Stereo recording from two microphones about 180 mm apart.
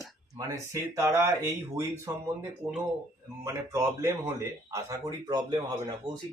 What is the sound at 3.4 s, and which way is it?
Speech, 15° right (ahead or behind).